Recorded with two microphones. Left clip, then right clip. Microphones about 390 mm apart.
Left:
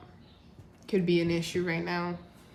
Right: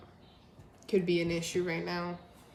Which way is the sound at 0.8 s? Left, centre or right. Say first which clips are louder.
Left 2 dB; centre.